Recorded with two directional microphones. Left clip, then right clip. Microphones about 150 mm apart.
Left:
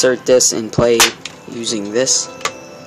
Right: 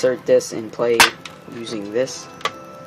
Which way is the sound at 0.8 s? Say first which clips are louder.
Left 2 dB; 25° left (ahead or behind).